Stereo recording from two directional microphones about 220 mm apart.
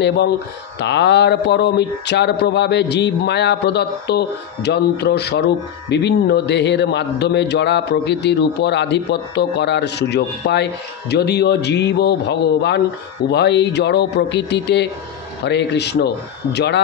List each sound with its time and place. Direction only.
0.7 s a man's voice: 50° left (ahead or behind)